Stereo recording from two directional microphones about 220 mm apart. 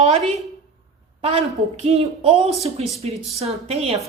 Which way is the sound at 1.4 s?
25° right (ahead or behind).